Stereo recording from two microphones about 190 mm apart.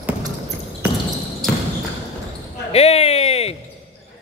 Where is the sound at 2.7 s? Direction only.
30° left (ahead or behind).